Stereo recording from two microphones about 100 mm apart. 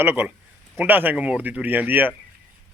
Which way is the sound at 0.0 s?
20° right (ahead or behind).